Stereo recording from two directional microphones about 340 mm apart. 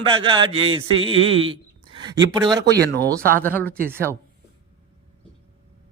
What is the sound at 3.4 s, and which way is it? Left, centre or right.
Speech, centre.